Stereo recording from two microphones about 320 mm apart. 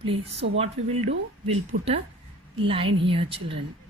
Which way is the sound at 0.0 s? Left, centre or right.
Centre.